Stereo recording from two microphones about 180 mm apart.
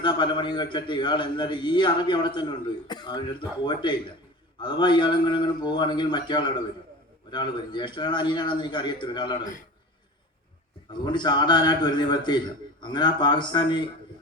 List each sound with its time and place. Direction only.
0.0 s a man's voice: 25° left (ahead or behind)
10.9 s a man's voice: 25° left (ahead or behind)